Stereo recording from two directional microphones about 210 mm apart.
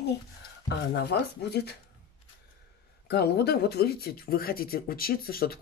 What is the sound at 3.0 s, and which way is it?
Speech, 50° left (ahead or behind).